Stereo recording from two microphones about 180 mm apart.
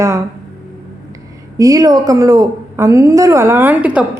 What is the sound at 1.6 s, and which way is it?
A woman's voice, 20° right (ahead or behind).